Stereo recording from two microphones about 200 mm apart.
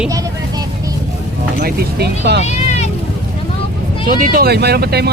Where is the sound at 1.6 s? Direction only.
55° right (ahead or behind).